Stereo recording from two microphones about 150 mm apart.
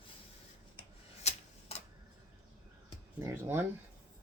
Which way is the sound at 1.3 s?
45° left (ahead or behind).